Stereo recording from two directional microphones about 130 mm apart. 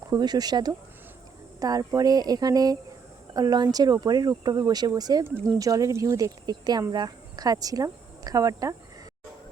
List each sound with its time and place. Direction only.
0.1 s speech: 30° right (ahead or behind)
5.2 s speech: 15° right (ahead or behind)